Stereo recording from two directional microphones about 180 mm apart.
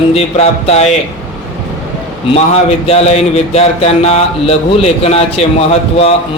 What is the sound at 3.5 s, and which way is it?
Speech, 35° left (ahead or behind).